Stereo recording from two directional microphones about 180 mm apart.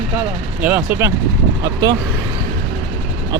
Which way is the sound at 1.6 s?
20° right (ahead or behind).